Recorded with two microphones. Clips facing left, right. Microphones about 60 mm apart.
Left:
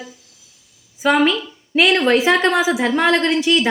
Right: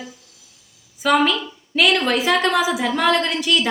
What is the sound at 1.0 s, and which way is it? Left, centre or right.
A woman's voice, centre.